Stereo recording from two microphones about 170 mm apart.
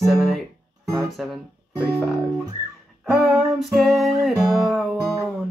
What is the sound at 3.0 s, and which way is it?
Music, centre (ahead or behind).